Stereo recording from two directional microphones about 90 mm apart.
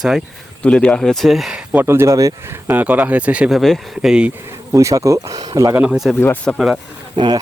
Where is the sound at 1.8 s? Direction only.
30° right (ahead or behind).